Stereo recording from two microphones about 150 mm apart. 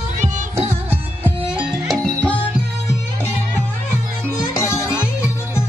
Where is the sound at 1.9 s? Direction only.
10° left (ahead or behind).